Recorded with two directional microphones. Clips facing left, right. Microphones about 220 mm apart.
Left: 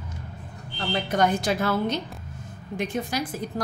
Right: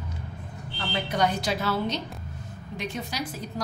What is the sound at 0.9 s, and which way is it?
Speech, 50° left (ahead or behind).